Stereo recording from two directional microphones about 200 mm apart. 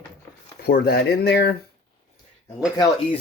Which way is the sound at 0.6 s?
50° left (ahead or behind).